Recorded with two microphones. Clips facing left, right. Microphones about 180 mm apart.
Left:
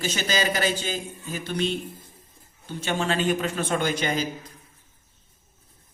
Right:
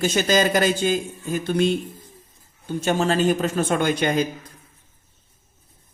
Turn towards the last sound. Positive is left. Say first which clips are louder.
# right 5 dB
turn(degrees=-55)  # may be behind; listen again after turning